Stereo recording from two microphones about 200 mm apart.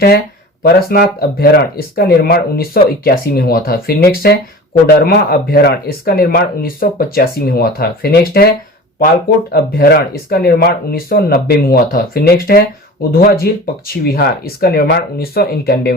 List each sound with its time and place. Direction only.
0.6 s speech: 50° left (ahead or behind)